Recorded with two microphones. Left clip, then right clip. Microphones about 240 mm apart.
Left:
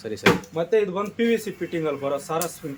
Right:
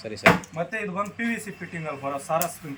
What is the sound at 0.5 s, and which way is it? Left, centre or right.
Speech, left.